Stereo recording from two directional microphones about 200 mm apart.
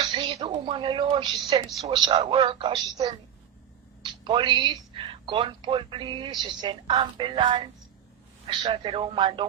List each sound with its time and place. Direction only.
0.0 s a woman's voice: 25° right (ahead or behind)